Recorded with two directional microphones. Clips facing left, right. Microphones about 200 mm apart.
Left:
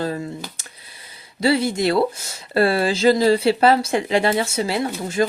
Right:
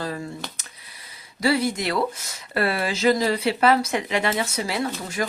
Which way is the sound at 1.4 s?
25° left (ahead or behind).